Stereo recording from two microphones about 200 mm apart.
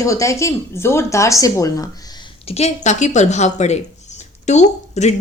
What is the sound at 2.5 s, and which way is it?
A woman's voice, 30° left (ahead or behind).